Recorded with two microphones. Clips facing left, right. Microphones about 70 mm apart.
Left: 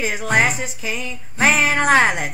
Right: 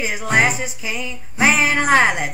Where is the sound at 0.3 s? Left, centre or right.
Centre.